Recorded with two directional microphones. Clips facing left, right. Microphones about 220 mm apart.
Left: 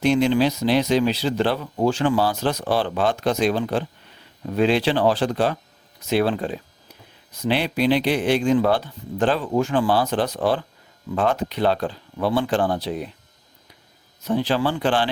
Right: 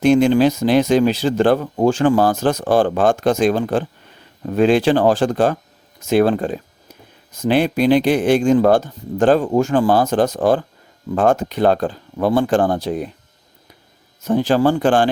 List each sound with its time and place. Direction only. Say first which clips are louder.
0.0 s speech: right 5 dB; 50° right (ahead or behind)
14.2 s speech: right 6 dB; 45° right (ahead or behind)